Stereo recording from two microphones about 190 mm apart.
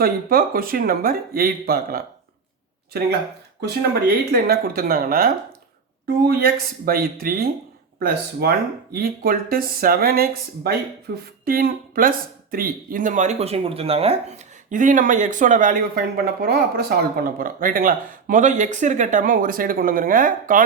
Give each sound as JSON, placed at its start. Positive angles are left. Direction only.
{"t": 0.0, "sound": "speech", "side_deg": -50}
{"t": 6.8, "sound": "speech", "side_deg": -50}